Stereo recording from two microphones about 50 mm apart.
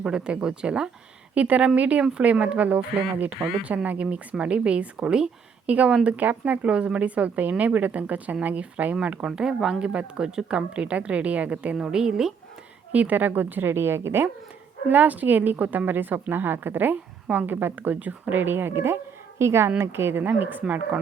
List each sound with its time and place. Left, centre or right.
0.0 s speech: centre
6.1 s speech: right
9.2 s speech: centre
10.8 s speech: right
11.8 s speech: centre
12.9 s speech: right
14.8 s a woman's voice: right
20.2 s speech: right